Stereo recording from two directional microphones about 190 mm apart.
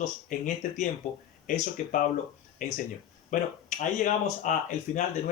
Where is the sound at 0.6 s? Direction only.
40° left (ahead or behind).